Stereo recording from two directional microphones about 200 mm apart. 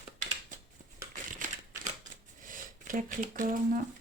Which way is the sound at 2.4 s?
40° right (ahead or behind).